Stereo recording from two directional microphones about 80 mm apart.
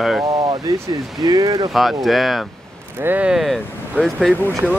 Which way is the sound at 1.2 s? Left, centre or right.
Right.